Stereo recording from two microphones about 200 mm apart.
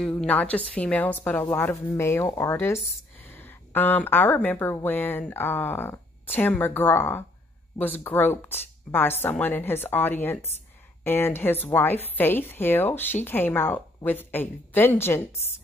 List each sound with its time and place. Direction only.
0.0 s a woman's voice: 5° left (ahead or behind)